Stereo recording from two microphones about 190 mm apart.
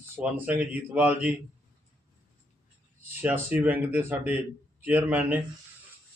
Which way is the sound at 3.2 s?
10° right (ahead or behind).